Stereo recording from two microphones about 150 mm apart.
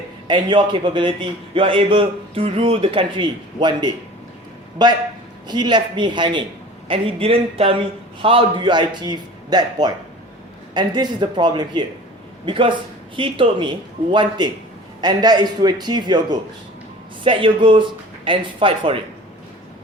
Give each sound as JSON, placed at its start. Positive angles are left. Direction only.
{"t": 0.3, "sound": "a man's voice", "side_deg": -30}